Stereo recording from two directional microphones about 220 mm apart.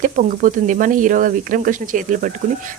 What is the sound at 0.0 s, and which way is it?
Speech, 35° right (ahead or behind).